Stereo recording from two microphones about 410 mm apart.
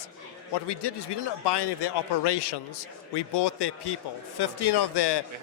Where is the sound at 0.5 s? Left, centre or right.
Left.